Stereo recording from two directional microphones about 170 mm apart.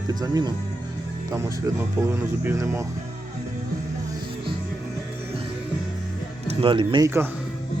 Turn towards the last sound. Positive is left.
turn(degrees=-25)  # may be behind; listen again after turning